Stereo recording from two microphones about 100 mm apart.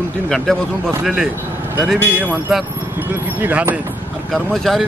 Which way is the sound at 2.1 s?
15° right (ahead or behind).